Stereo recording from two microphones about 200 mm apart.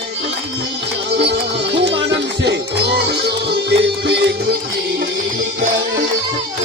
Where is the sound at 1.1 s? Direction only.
60° right (ahead or behind).